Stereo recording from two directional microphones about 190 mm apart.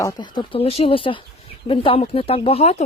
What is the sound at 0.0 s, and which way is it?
Speech, 25° left (ahead or behind).